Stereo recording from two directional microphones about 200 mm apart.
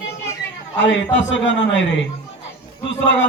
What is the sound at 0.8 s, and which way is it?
A man's voice, 65° left (ahead or behind).